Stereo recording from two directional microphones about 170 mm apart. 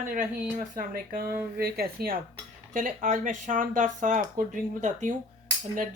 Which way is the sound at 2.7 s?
50° right (ahead or behind).